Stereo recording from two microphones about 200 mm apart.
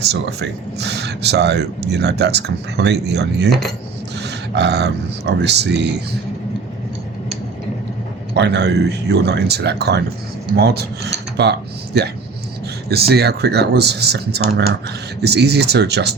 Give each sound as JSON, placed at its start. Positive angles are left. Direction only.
{"t": 0.0, "sound": "speech", "side_deg": -55}
{"t": 8.4, "sound": "speech", "side_deg": -60}
{"t": 10.6, "sound": "rub", "side_deg": -55}
{"t": 11.4, "sound": "speech", "side_deg": -55}